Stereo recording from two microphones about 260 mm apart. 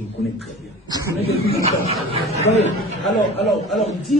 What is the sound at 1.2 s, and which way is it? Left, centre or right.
Speech, right.